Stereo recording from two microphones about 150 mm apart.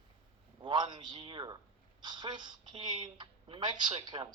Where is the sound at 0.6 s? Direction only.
30° right (ahead or behind).